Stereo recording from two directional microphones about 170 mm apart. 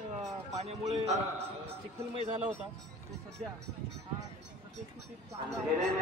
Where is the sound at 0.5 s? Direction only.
40° right (ahead or behind).